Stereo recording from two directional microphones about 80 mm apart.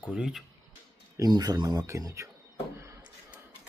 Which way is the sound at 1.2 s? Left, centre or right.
Right.